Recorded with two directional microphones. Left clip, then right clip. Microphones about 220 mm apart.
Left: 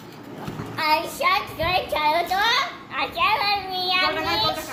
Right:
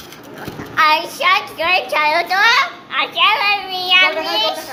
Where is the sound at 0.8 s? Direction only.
50° right (ahead or behind).